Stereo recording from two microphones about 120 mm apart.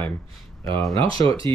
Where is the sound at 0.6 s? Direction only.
30° left (ahead or behind).